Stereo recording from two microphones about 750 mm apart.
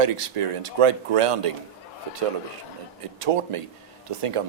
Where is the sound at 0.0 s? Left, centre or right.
Right.